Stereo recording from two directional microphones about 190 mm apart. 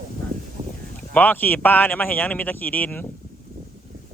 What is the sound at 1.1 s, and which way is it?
Speech, 10° left (ahead or behind).